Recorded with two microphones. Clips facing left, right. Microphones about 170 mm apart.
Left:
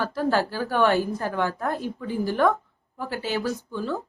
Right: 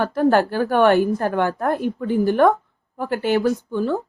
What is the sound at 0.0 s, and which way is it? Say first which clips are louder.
Speech: right 7 dB; 55° right (ahead or behind).